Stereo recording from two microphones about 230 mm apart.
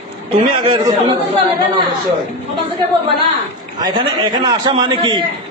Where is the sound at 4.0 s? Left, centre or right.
Centre.